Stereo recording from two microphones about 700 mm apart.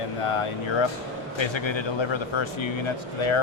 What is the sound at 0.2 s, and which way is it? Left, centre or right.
A man's voice, left.